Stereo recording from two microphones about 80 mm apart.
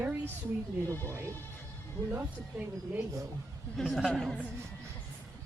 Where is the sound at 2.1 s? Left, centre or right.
Right.